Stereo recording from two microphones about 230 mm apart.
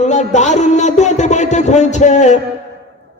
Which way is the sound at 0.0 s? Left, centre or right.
Left.